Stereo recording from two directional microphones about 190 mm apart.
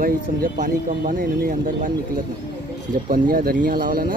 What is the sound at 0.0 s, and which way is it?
Speech, 45° right (ahead or behind).